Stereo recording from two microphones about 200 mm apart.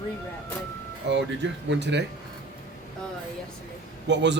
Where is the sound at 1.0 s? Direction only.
60° right (ahead or behind).